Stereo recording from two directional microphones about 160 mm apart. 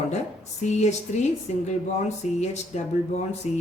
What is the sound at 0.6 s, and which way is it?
Speech, 45° left (ahead or behind).